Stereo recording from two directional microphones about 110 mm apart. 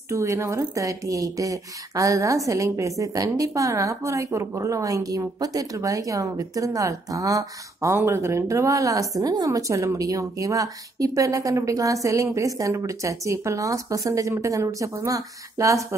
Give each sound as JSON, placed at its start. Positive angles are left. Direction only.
{"t": 0.1, "sound": "speech", "side_deg": -30}